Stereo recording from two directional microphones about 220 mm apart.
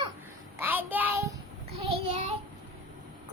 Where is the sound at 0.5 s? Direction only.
10° right (ahead or behind).